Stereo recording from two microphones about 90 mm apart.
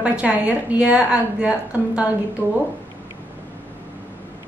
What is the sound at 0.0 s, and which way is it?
A woman's voice, 15° right (ahead or behind).